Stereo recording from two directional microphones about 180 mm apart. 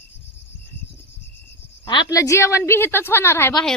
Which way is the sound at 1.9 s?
25° left (ahead or behind).